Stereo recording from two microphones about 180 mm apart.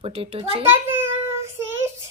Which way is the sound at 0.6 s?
10° right (ahead or behind).